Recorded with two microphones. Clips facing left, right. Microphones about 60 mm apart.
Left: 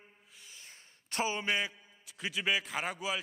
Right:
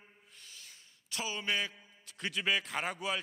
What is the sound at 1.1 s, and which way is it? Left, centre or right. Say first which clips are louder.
Speech: left 6 dB; left.